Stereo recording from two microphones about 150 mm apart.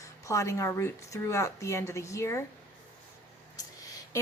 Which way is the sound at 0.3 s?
20° left (ahead or behind).